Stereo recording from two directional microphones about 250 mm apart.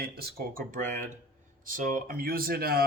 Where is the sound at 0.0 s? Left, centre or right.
Right.